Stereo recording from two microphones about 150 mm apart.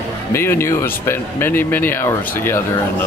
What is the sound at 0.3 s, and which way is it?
Speech, 15° left (ahead or behind).